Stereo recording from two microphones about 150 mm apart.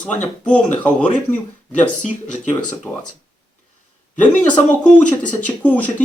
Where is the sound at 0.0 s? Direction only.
10° left (ahead or behind).